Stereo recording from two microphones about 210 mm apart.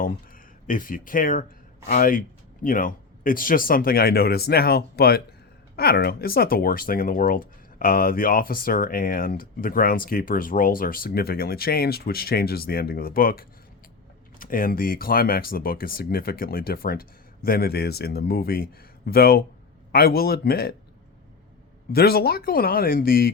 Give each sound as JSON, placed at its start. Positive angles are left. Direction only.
{"t": 0.0, "sound": "speech", "side_deg": 40}
{"t": 21.9, "sound": "speech", "side_deg": 50}